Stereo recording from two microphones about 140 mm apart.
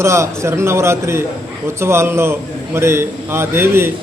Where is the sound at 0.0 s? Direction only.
20° right (ahead or behind).